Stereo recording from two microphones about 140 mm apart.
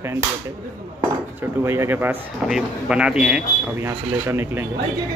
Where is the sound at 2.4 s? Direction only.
5° right (ahead or behind).